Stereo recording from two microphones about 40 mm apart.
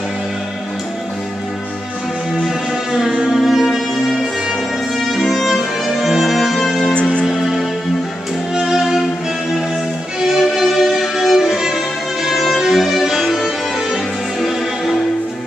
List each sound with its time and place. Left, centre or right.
2.4 s music: centre
6.9 s music: left
7.2 s music: centre
8.5 s violin: centre
10.2 s music: centre
11.3 s violin: centre
12.5 s music: centre